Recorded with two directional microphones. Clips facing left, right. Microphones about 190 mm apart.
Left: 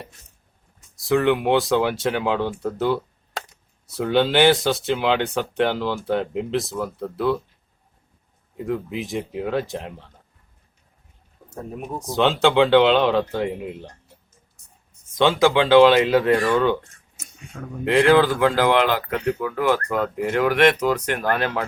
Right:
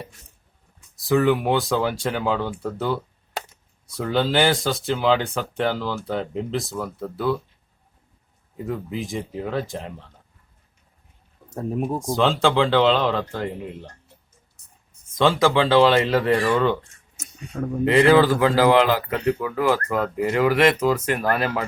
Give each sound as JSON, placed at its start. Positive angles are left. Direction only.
{"t": 0.9, "sound": "speech", "side_deg": 0}
{"t": 2.6, "sound": "a sound", "side_deg": 0}
{"t": 3.8, "sound": "speech", "side_deg": 0}
{"t": 8.6, "sound": "speech", "side_deg": 0}
{"t": 11.9, "sound": "speech", "side_deg": 0}
{"t": 15.1, "sound": "speech", "side_deg": 0}
{"t": 17.2, "sound": "a sound", "side_deg": -35}
{"t": 17.8, "sound": "speech", "side_deg": 0}